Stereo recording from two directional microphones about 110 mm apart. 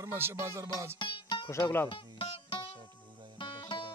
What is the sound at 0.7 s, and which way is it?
Music, 50° left (ahead or behind).